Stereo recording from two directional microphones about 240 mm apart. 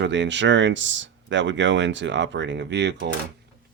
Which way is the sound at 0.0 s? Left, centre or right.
Right.